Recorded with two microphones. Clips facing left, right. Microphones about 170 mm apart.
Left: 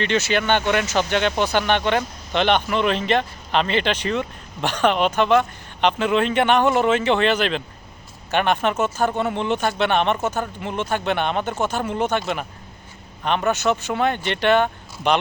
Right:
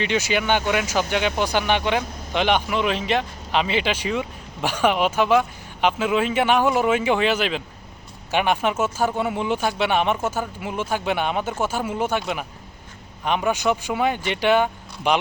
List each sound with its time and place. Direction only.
0.0 s speech: 10° right (ahead or behind)